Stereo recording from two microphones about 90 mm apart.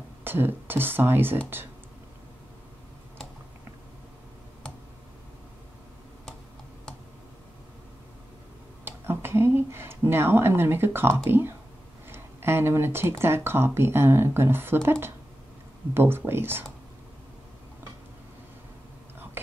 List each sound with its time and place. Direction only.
0.2 s speech: 25° right (ahead or behind)
8.8 s a sound: 25° right (ahead or behind)
12.1 s speech: 25° right (ahead or behind)